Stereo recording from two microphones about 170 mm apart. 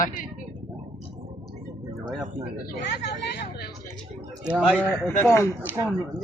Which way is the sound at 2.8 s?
85° left.